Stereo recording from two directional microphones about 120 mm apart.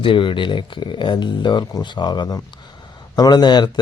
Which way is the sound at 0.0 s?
45° left (ahead or behind).